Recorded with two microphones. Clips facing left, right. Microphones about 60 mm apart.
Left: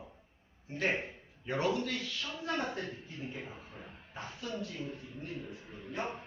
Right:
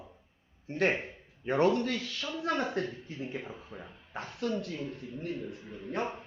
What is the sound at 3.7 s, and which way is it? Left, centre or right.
Speech, right.